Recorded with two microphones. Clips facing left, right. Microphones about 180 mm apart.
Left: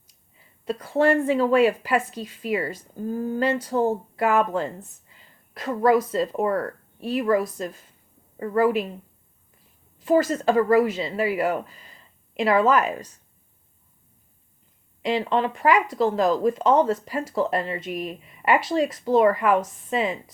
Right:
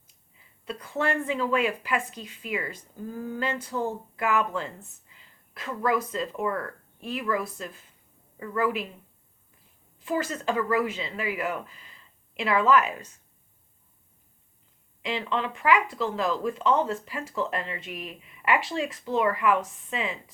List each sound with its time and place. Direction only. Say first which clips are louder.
0.6 s speech: left 8 dB; 40° left (ahead or behind)
10.0 s speech: left 9 dB; 40° left (ahead or behind)
15.0 s speech: left 7 dB; 40° left (ahead or behind)